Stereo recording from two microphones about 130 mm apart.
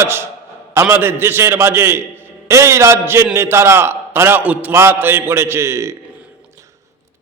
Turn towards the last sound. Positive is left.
turn(degrees=-20)  # may be behind; listen again after turning